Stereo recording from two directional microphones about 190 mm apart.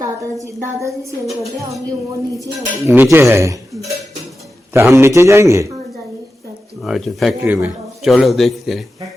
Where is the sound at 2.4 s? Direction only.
10° right (ahead or behind).